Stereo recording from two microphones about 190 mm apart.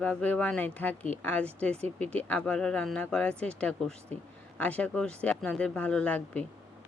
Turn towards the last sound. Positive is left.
turn(degrees=5)  # may be behind; listen again after turning